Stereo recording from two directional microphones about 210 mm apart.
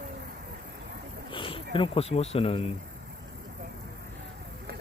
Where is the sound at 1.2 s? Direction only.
25° left (ahead or behind).